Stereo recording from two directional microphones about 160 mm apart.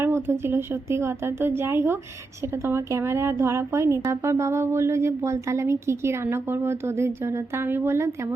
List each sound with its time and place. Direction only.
0.0 s speech: 15° right (ahead or behind)